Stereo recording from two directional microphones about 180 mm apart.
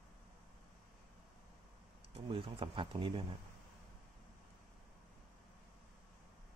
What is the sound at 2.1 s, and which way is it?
Speech, 30° right (ahead or behind).